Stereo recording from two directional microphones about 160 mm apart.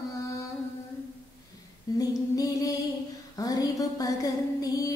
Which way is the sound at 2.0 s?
20° left (ahead or behind).